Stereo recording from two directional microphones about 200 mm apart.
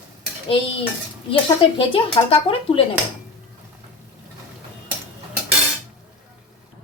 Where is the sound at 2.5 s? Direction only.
30° left (ahead or behind).